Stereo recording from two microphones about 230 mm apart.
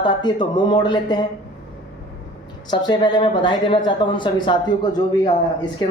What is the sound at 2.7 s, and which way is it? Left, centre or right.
Speech, centre.